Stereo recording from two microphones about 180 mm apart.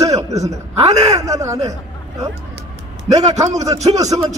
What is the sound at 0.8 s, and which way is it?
Speech, 35° right (ahead or behind).